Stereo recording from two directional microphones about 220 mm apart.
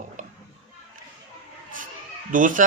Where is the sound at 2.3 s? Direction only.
40° right (ahead or behind).